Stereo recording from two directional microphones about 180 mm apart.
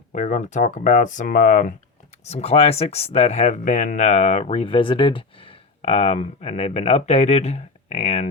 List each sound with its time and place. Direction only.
0.1 s speech: 45° left (ahead or behind)
2.2 s speech: 35° left (ahead or behind)